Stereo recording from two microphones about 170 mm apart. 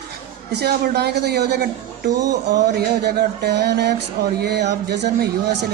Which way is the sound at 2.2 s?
20° right (ahead or behind).